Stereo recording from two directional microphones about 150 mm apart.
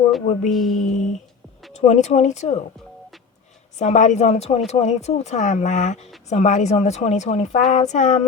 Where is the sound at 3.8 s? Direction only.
50° left (ahead or behind).